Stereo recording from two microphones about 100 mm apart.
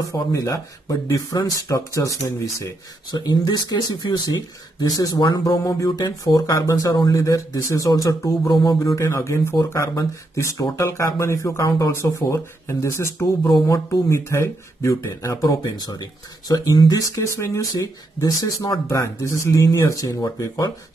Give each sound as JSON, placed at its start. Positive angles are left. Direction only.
{"t": 0.3, "sound": "speech", "side_deg": 35}
{"t": 15.7, "sound": "speech", "side_deg": 40}